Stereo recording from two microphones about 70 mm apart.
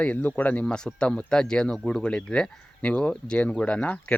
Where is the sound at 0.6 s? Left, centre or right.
Centre.